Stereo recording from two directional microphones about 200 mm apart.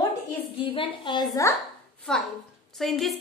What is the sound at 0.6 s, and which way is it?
Speech, 25° left (ahead or behind).